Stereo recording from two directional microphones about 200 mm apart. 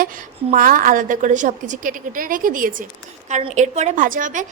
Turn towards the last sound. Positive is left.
turn(degrees=-40)  # may be behind; listen again after turning